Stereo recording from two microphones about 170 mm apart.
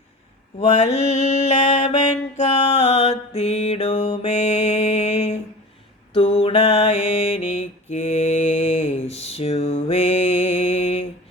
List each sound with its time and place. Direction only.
0.8 s mantra: 40° left (ahead or behind)